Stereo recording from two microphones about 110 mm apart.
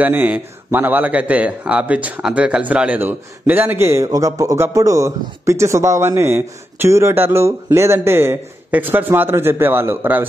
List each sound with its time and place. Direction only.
0.0 s a man's voice: 15° right (ahead or behind)